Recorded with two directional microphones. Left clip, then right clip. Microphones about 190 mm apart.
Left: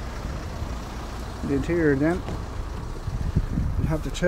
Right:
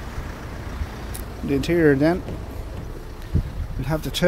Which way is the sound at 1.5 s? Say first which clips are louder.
Right 4 dB; 25° right (ahead or behind).